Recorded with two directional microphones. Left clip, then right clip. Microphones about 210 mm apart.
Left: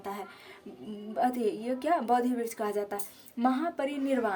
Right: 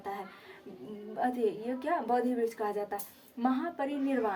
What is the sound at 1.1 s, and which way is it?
A woman's voice, 55° left (ahead or behind).